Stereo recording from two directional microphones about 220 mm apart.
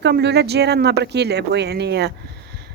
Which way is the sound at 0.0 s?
50° right (ahead or behind).